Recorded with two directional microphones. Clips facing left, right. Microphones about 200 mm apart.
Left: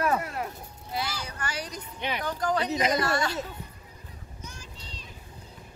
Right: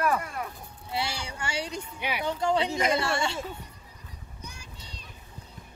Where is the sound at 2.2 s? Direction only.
25° right (ahead or behind).